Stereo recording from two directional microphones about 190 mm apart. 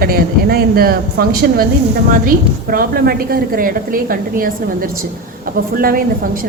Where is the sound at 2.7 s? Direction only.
50° right (ahead or behind).